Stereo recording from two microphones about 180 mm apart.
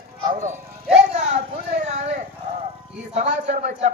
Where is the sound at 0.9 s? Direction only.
35° right (ahead or behind).